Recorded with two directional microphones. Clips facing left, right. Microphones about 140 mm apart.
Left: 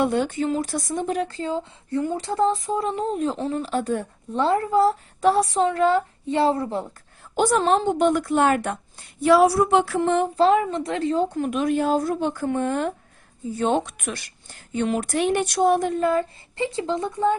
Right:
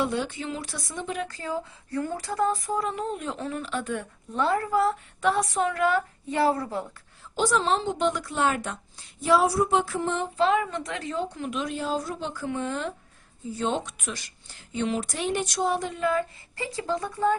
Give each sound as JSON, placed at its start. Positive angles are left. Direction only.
{"t": 0.0, "sound": "speech", "side_deg": 50}
{"t": 7.3, "sound": "a woman's voice", "side_deg": 55}
{"t": 10.3, "sound": "a woman's voice", "side_deg": 35}
{"t": 16.6, "sound": "speech", "side_deg": 25}